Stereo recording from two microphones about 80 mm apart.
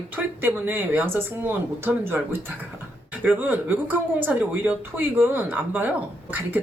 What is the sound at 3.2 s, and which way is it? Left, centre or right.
Speech, right.